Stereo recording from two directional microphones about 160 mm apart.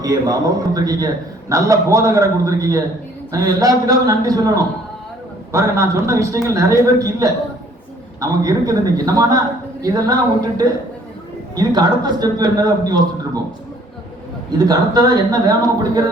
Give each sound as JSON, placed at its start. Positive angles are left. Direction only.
{"t": 0.0, "sound": "a man's voice", "side_deg": -20}
{"t": 14.6, "sound": "a man's voice", "side_deg": -25}